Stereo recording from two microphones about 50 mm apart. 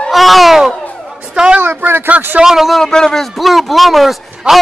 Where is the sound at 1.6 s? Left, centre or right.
Right.